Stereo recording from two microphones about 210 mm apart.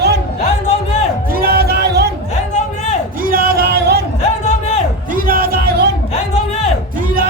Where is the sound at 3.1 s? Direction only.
45° right (ahead or behind).